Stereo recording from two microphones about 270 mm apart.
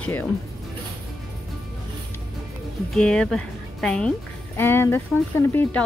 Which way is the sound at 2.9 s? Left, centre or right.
Centre.